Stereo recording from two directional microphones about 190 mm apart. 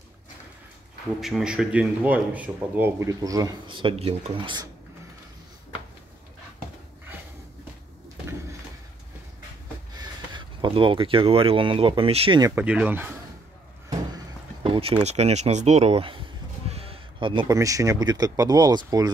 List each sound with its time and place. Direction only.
1.2 s speech: 5° right (ahead or behind); by 4.6 s 25° right (ahead or behind)
9.9 s speech: 25° right (ahead or behind)
12.5 s speech: 5° right (ahead or behind)
14.6 s a sound: 30° right (ahead or behind)
15.0 s speech: 35° right (ahead or behind)